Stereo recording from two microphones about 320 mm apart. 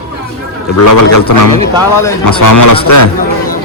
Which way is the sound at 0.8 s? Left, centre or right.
Left.